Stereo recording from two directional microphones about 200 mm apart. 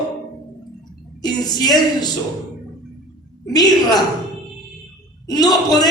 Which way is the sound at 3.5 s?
20° left (ahead or behind).